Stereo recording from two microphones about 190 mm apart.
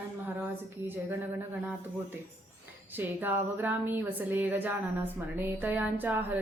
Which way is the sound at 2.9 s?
10° right (ahead or behind).